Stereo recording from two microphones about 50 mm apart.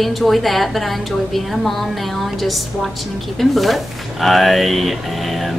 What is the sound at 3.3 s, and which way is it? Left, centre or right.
A woman's voice, centre.